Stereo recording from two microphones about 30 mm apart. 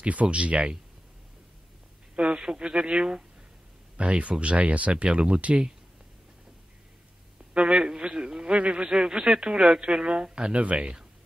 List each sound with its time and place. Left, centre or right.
0.0 s speech: right
2.3 s speech: right
3.9 s speech: right
7.5 s a sound: right
8.2 s a sound: right
8.5 s speech: right
8.8 s speech: right
10.3 s speech: right